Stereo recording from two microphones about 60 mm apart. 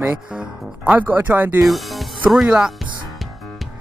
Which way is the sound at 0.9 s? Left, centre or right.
Right.